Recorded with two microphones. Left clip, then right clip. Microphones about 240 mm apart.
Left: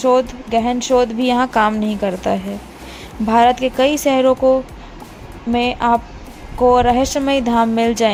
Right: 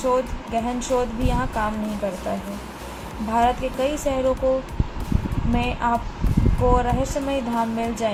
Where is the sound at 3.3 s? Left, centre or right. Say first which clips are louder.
Left 8 dB; left.